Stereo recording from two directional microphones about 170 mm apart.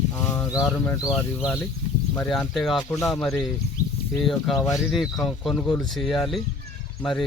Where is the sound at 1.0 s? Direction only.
5° right (ahead or behind).